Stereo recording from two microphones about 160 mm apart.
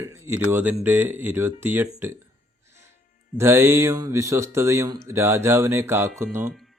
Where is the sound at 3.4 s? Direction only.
15° right (ahead or behind).